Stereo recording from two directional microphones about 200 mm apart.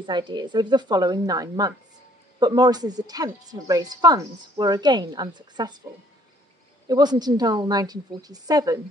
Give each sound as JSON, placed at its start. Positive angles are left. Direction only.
{"t": 0.0, "sound": "speech", "side_deg": -20}
{"t": 6.9, "sound": "speech", "side_deg": -20}